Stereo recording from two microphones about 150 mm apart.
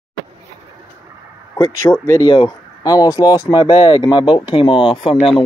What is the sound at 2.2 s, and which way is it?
Speech, 30° left (ahead or behind).